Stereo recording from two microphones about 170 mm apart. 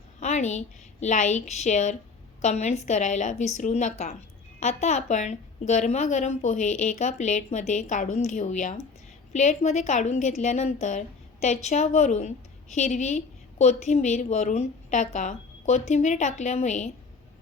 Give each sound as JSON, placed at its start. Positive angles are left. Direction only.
{"t": 0.2, "sound": "a woman's voice", "side_deg": 45}